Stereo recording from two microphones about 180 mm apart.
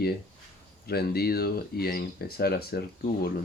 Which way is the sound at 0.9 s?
60° left (ahead or behind).